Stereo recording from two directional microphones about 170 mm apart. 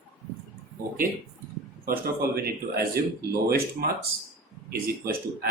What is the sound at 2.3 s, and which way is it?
Speech, 65° right (ahead or behind).